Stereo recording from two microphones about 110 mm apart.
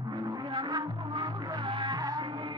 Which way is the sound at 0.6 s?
40° right (ahead or behind).